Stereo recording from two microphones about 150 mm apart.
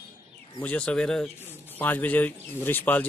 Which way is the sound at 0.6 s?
5° left (ahead or behind).